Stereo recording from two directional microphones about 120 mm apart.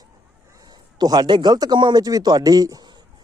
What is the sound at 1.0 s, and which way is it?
Speech, 35° right (ahead or behind).